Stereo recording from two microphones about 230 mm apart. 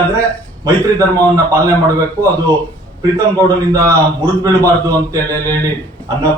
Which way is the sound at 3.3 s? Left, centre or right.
Centre.